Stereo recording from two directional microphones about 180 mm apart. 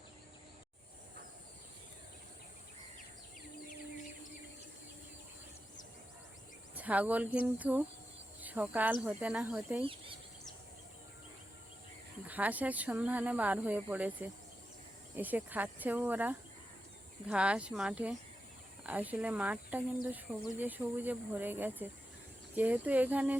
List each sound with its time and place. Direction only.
6.7 s speech: 10° right (ahead or behind)
9.8 s speech: 30° right (ahead or behind)
12.3 s speech: 10° right (ahead or behind)